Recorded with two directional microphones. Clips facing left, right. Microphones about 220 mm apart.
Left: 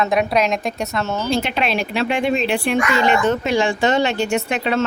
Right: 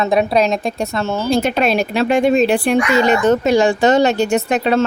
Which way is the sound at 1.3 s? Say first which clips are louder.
Right 6 dB; 45° right (ahead or behind).